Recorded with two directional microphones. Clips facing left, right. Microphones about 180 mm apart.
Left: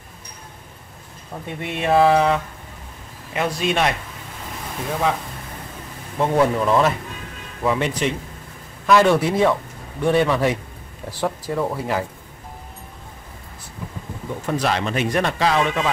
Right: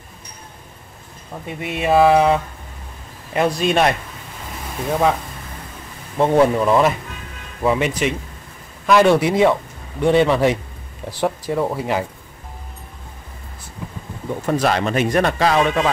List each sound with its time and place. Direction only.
1.5 s speech: 5° right (ahead or behind)
3.3 s a man's voice: 40° right (ahead or behind)
6.1 s speech: 25° right (ahead or behind)
6.6 s speech: 10° right (ahead or behind)
14.4 s speech: 45° right (ahead or behind)